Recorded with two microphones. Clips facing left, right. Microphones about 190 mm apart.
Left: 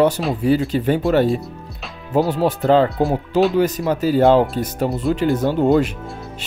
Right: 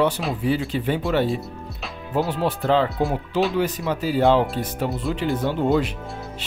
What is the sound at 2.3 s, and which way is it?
Speech, 45° left (ahead or behind).